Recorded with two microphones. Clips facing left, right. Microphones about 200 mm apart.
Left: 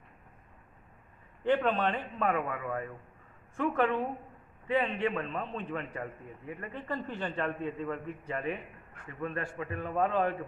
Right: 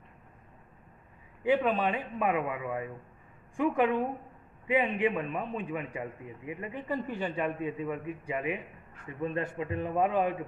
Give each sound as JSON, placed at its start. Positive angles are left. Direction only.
{"t": 1.4, "sound": "a man's voice", "side_deg": -10}